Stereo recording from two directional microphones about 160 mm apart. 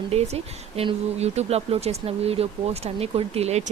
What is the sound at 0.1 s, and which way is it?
A woman's voice, 40° right (ahead or behind).